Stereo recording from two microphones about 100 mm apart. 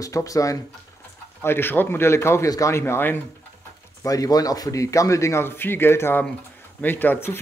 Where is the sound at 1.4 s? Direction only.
25° left (ahead or behind).